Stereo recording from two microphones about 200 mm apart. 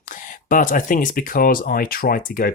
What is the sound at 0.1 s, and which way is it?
Speech, 40° left (ahead or behind).